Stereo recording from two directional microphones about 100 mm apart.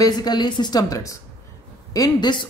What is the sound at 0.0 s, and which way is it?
Speech, 45° left (ahead or behind).